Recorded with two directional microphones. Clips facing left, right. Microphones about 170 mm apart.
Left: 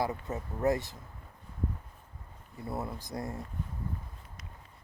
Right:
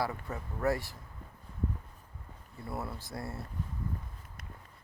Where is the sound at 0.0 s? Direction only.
20° left (ahead or behind).